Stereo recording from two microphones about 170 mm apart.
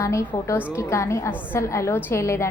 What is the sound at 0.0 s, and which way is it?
A woman's voice, 15° left (ahead or behind).